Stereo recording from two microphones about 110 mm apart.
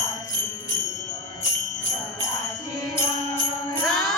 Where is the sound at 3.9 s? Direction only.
Centre (ahead or behind).